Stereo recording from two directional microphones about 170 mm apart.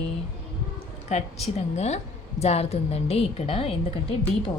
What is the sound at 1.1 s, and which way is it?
A woman's voice, 40° left (ahead or behind).